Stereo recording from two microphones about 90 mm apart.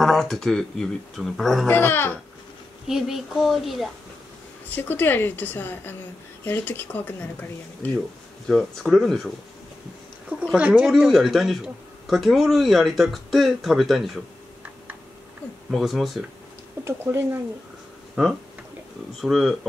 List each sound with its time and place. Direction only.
0.0 s a man's voice: centre (ahead or behind)
1.7 s a woman's voice: 25° left (ahead or behind)
2.9 s a man's voice: 5° right (ahead or behind)
4.7 s a woman's voice: 20° left (ahead or behind)
8.5 s a man's voice: 5° left (ahead or behind)
10.4 s speech: 15° right (ahead or behind)
10.9 s a man's voice: 5° right (ahead or behind)
15.7 s a man's voice: centre (ahead or behind)
16.8 s speech: 25° right (ahead or behind)
18.2 s a man's voice: 5° right (ahead or behind)